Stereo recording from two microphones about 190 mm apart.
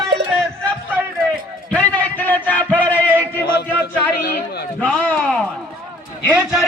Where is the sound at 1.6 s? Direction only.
5° left (ahead or behind).